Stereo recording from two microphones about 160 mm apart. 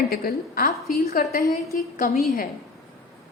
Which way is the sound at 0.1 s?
70° left (ahead or behind).